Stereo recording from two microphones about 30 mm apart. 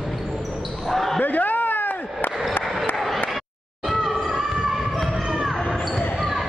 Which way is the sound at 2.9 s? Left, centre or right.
Centre.